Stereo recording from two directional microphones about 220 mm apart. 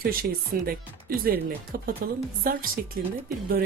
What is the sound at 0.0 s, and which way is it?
Speech, 40° right (ahead or behind).